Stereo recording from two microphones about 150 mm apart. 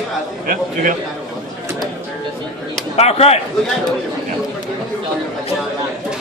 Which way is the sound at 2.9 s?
45° left (ahead or behind).